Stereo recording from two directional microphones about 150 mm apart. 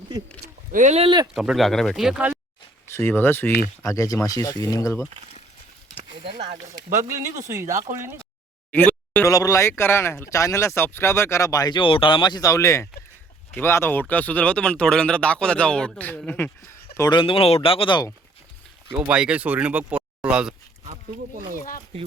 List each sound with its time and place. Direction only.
0.1 s speech: 25° right (ahead or behind)
0.7 s speech: 55° right (ahead or behind)
1.0 s speech: 30° right (ahead or behind)
1.3 s speech: centre (ahead or behind)
2.8 s speech: 15° left (ahead or behind)
7.3 s speech: 20° right (ahead or behind)
8.7 s a sound: 10° left (ahead or behind)
9.2 s speech: 20° left (ahead or behind)
17.0 s speech: 30° left (ahead or behind)
18.9 s speech: 10° right (ahead or behind)
20.8 s speech: 55° right (ahead or behind)